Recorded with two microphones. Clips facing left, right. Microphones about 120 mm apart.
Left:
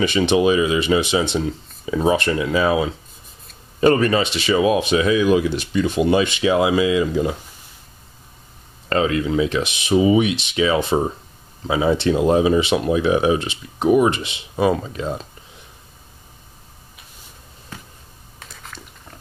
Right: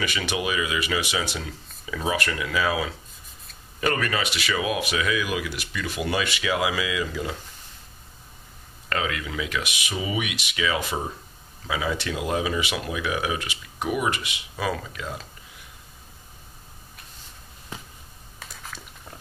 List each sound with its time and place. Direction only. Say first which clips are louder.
0.0 s speech: left 11 dB; 25° left (ahead or behind)
8.8 s speech: left 9 dB; 30° left (ahead or behind)
18.4 s a sound: left 1 dB; 5° right (ahead or behind)